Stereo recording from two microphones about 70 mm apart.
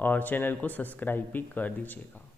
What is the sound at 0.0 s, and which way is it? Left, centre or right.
A man's voice, left.